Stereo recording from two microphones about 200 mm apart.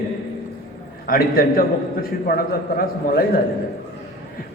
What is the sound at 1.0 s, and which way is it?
A man's voice, 45° left (ahead or behind).